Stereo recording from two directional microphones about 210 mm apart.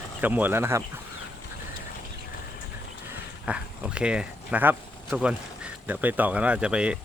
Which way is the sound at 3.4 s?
5° right (ahead or behind).